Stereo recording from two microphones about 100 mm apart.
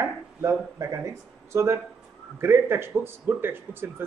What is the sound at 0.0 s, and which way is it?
Speech, 25° right (ahead or behind).